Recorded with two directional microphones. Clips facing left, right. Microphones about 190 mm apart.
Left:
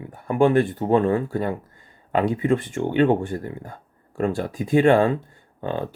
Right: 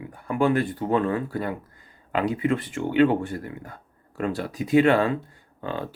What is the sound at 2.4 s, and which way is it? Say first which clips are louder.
Speech: left 3 dB; 45° left (ahead or behind).